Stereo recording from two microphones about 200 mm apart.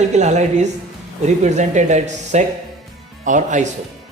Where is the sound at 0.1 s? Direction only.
35° right (ahead or behind).